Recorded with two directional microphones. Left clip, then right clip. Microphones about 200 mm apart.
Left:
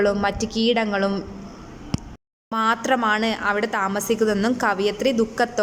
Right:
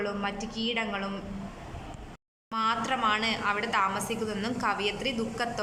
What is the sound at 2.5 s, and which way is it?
A woman's voice, 35° left (ahead or behind).